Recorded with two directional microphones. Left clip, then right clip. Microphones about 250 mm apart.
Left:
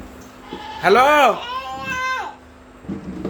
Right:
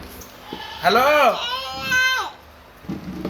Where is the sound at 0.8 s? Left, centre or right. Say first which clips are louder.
Left 3 dB; centre.